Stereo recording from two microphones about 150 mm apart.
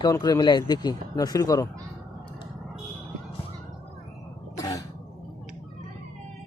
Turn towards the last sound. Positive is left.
turn(degrees=20)  # may be behind; listen again after turning